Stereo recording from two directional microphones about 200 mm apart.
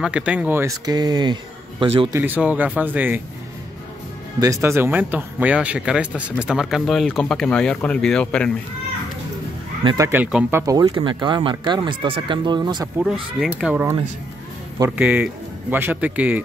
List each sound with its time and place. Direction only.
0.0 s speech: 5° right (ahead or behind); by 2.0 s 25° right (ahead or behind)
2.1 s speech: 10° right (ahead or behind)
4.4 s speech: 15° right (ahead or behind); by 8.5 s 5° left (ahead or behind)
9.8 s speech: 15° right (ahead or behind)
10.6 s speech: 20° right (ahead or behind)
13.0 s speech: centre (ahead or behind)
15.0 s speech: 5° right (ahead or behind)